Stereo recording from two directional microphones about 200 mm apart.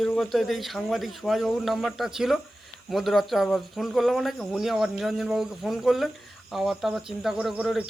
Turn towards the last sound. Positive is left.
turn(degrees=-5)  # may be behind; listen again after turning